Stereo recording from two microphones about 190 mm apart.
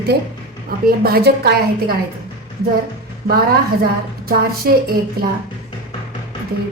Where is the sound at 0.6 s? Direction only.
55° right (ahead or behind).